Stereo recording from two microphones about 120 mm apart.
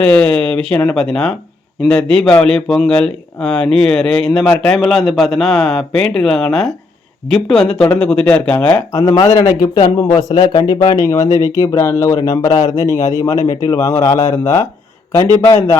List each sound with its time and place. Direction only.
0.0 s a man's voice: 10° left (ahead or behind)
8.9 s speech: 30° left (ahead or behind)
11.3 s speech: 35° right (ahead or behind)
11.5 s speech: 25° left (ahead or behind)